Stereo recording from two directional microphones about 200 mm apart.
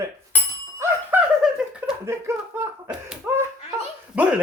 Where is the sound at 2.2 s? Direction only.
10° right (ahead or behind).